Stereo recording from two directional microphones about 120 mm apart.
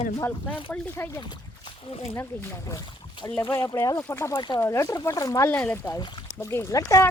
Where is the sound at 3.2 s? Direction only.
30° left (ahead or behind).